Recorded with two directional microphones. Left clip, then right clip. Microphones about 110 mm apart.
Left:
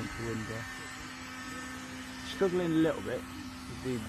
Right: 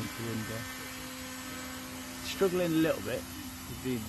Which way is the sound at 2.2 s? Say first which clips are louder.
Right 1 dB; 5° right (ahead or behind).